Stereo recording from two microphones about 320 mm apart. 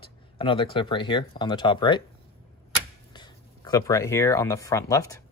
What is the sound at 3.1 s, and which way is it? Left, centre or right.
Speech, centre.